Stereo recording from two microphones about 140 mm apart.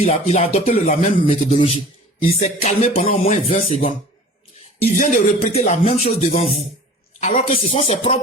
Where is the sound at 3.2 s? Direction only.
55° left (ahead or behind).